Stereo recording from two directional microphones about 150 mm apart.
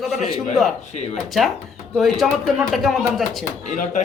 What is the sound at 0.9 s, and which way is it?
Speech, 45° left (ahead or behind).